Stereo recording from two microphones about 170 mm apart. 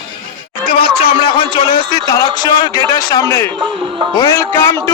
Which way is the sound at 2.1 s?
25° left (ahead or behind).